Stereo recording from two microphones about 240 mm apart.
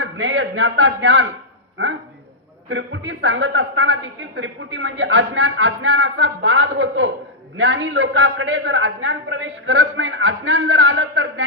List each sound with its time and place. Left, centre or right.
0.0 s a man's voice: right
2.6 s a woman's voice: right